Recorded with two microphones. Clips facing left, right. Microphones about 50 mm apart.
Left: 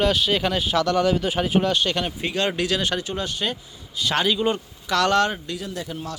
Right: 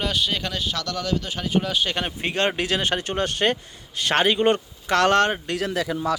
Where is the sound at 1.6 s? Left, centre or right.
Centre.